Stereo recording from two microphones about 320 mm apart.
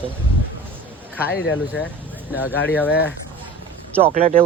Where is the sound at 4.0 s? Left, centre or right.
Right.